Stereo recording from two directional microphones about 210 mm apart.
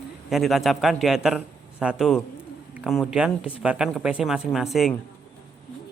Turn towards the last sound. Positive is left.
turn(degrees=0)  # may be behind; listen again after turning